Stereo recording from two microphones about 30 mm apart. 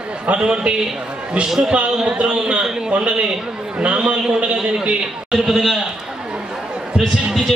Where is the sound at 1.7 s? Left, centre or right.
Right.